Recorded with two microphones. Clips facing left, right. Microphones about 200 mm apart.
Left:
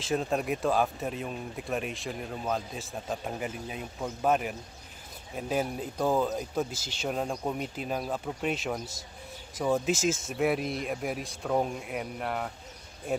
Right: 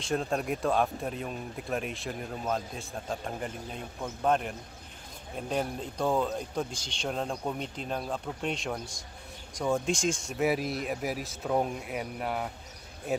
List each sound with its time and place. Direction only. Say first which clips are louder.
0.0 s speech: left 1 dB; centre (ahead or behind)